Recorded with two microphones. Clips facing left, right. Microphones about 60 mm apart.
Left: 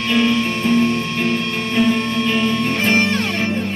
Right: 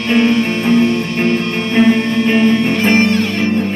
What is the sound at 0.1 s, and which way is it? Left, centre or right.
Music, right.